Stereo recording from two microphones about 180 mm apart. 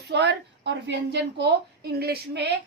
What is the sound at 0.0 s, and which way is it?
A woman's voice, 70° right (ahead or behind).